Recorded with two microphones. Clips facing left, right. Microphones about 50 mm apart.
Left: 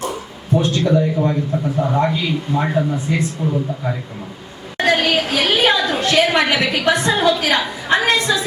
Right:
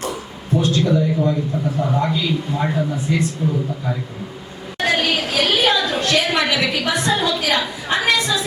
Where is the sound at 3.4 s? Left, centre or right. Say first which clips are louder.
Left 1 dB; left.